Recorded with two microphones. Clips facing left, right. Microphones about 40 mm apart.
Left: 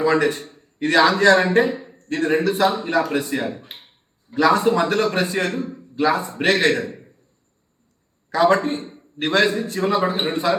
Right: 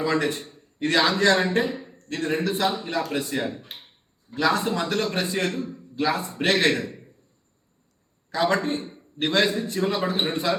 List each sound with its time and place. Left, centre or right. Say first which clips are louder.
0.0 s a man's voice: left 6 dB; left
0.3 s a man's voice: left 5 dB; centre
3.2 s a man's voice: left 4 dB; centre
4.5 s speech: left 7 dB; centre
5.6 s a sound: left 5 dB; centre
6.1 s a man's voice: left 4 dB; centre
8.3 s a man's voice: left 6 dB; centre